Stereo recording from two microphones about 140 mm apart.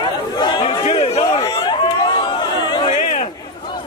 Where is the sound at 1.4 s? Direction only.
35° left (ahead or behind).